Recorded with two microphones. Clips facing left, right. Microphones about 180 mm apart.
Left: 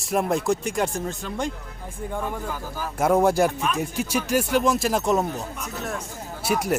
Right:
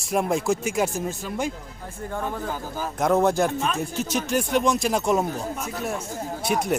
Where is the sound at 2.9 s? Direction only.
10° left (ahead or behind).